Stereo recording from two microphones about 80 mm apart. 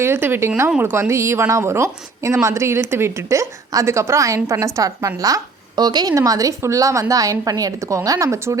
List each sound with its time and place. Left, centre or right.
0.0 s a woman's voice: right
6.1 s a woman's voice: right